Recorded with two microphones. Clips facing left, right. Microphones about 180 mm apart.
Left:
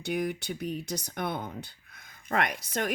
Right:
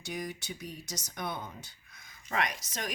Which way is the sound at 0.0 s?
60° left (ahead or behind).